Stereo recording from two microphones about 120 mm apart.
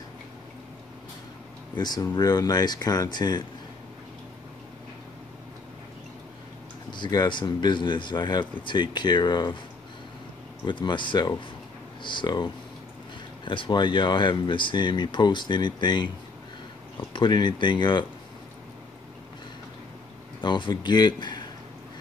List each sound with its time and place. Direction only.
1.8 s speech: 35° left (ahead or behind)
6.9 s speech: 35° left (ahead or behind)
10.6 s speech: 40° left (ahead or behind)
13.5 s speech: 40° left (ahead or behind)
20.4 s speech: 40° left (ahead or behind)